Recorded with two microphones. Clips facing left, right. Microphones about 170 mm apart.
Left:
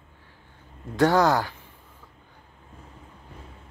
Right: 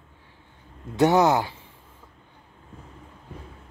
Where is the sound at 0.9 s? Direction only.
20° right (ahead or behind).